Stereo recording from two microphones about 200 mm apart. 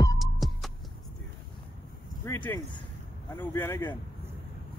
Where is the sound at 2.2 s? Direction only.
10° left (ahead or behind).